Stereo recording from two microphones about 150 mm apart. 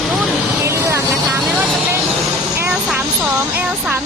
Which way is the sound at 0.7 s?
20° right (ahead or behind).